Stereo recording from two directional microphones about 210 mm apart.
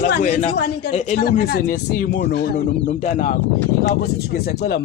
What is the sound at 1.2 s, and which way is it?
Speech, 45° left (ahead or behind).